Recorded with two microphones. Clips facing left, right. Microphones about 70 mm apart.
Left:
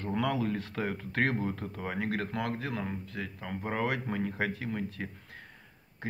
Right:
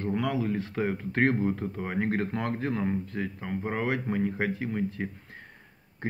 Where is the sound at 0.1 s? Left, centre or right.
Centre.